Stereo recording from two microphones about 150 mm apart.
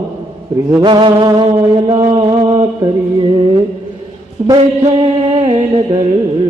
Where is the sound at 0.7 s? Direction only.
30° right (ahead or behind).